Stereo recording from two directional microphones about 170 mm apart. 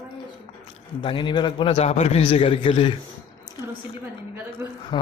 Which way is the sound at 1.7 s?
40° left (ahead or behind).